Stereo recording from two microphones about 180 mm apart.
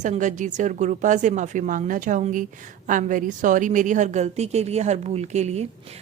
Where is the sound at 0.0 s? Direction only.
40° right (ahead or behind).